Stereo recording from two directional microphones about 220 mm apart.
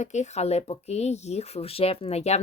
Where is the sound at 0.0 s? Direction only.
30° left (ahead or behind).